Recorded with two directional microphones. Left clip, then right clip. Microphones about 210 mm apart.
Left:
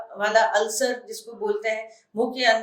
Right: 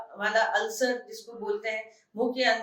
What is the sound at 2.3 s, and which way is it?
Speech, 55° left (ahead or behind).